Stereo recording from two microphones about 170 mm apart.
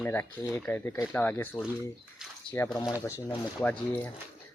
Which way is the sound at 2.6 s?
15° left (ahead or behind).